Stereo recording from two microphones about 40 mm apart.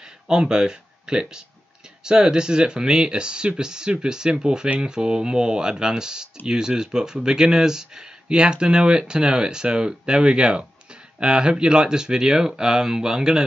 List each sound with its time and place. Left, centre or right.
0.3 s speech: centre